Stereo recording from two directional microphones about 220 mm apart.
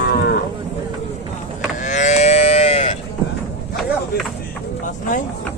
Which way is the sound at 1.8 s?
35° left (ahead or behind).